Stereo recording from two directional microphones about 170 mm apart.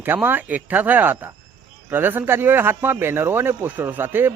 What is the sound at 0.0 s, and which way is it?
Speech, 10° right (ahead or behind).